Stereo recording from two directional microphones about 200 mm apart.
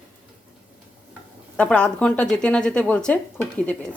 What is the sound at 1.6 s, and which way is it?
A woman's voice, 5° left (ahead or behind).